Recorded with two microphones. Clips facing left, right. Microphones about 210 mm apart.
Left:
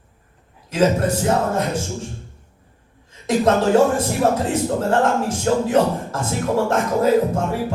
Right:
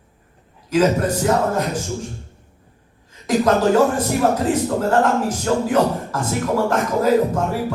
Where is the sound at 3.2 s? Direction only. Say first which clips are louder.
Right 1 dB; 25° left (ahead or behind).